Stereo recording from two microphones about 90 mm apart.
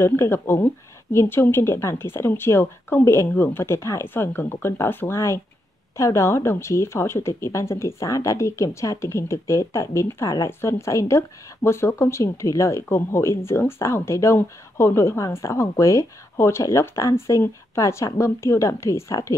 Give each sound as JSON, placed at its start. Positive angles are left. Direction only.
{"t": 0.0, "sound": "speech", "side_deg": 25}